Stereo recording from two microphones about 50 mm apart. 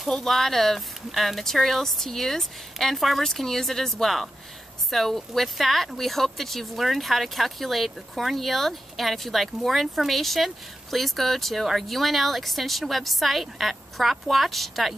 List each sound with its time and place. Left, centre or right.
0.0 s speech: centre